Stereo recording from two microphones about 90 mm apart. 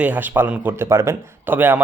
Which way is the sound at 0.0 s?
20° right (ahead or behind).